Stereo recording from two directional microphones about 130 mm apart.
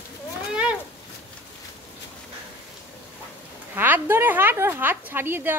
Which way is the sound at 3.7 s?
15° right (ahead or behind).